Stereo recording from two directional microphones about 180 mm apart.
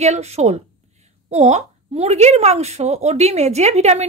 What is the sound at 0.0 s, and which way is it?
A woman's voice, 35° right (ahead or behind).